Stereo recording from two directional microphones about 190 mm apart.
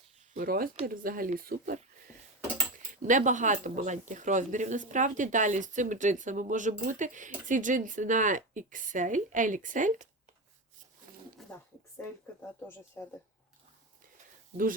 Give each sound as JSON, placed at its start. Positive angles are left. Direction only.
{"t": 0.3, "sound": "speech", "side_deg": -50}
{"t": 3.0, "sound": "speech", "side_deg": -40}
{"t": 11.4, "sound": "a sound", "side_deg": 0}
{"t": 13.0, "sound": "speech", "side_deg": 10}